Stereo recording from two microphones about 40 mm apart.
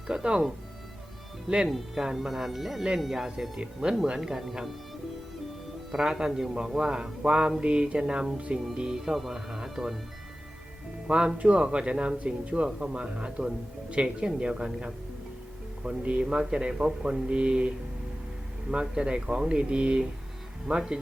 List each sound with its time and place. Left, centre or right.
0.1 s speech: centre
1.5 s speech: right
2.1 s speech: centre
3.6 s speech: right
5.9 s speech: centre
9.0 s speech: centre
11.0 s speech: right